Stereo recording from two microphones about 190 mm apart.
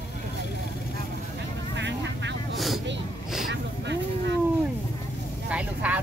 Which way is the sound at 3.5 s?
65° right (ahead or behind).